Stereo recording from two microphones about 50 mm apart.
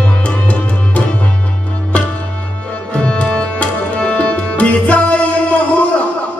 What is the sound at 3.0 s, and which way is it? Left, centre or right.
Tabla, left.